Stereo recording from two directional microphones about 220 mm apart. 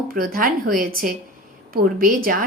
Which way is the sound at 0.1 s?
40° right (ahead or behind).